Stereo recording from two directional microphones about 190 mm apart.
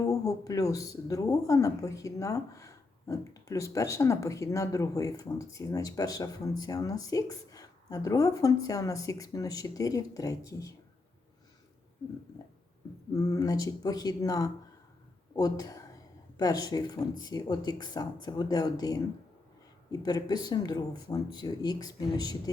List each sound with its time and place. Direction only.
0.0 s speech: 15° left (ahead or behind)
13.1 s speech: 20° left (ahead or behind)